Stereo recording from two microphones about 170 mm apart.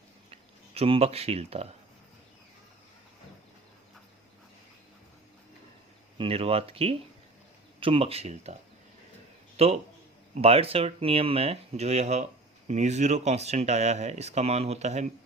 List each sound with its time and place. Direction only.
0.3 s speech: 35° right (ahead or behind)
6.1 s speech: 35° right (ahead or behind)
9.6 s speech: 35° right (ahead or behind)